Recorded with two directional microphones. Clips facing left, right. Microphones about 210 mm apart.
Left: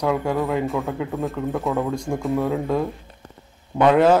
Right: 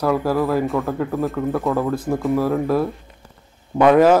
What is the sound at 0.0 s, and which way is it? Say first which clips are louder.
Speech: right 3 dB; 5° right (ahead or behind).